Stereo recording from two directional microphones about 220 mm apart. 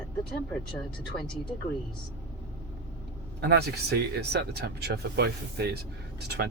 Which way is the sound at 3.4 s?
50° right (ahead or behind).